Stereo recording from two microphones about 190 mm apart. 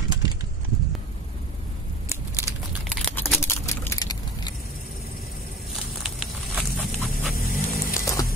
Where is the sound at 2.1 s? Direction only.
15° right (ahead or behind).